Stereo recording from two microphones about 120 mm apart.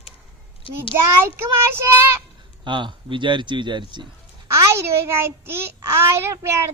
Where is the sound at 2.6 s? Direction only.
40° right (ahead or behind).